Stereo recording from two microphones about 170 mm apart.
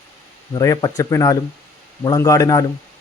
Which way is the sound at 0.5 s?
20° left (ahead or behind).